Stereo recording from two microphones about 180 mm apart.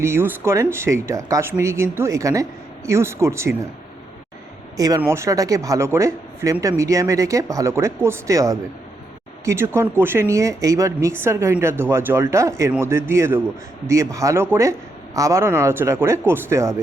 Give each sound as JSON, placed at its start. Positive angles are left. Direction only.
{"t": 0.0, "sound": "speech", "side_deg": -15}
{"t": 4.8, "sound": "speech", "side_deg": -15}